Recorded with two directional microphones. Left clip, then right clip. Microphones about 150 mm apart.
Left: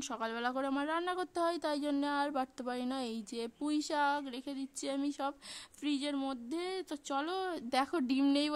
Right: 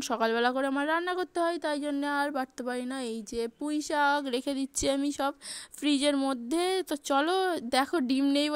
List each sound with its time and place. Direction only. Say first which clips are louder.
0.1 s speech: right 10 dB; 35° right (ahead or behind)
4.3 s speech: right 11 dB; 45° right (ahead or behind); by 8.5 s 20° right (ahead or behind)